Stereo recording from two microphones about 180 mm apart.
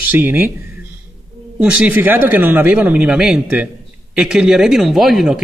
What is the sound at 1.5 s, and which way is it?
Speech, 5° right (ahead or behind).